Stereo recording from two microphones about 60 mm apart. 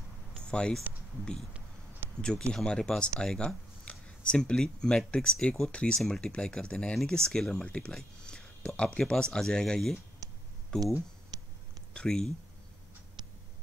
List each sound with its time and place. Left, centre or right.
0.4 s speech: centre
2.0 s a sound: right
2.5 s speech: centre
10.2 s a sound: right
10.7 s speech: centre
11.3 s cat: right
11.9 s speech: centre